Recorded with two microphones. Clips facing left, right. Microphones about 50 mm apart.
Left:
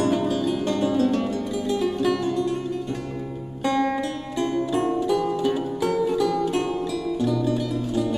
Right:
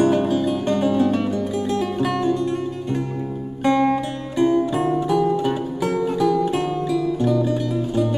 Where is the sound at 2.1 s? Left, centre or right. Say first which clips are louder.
Right 4 dB; right.